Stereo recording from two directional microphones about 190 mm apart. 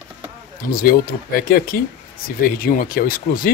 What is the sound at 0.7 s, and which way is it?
Speech, 50° left (ahead or behind).